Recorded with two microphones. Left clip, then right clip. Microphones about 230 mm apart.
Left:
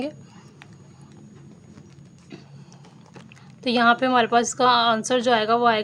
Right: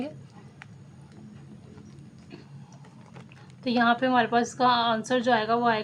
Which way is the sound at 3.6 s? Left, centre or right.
Left.